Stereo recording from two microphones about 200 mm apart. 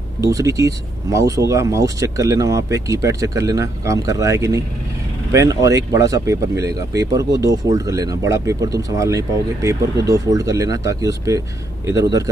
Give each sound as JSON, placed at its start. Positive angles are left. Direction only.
{"t": 0.2, "sound": "speech", "side_deg": -15}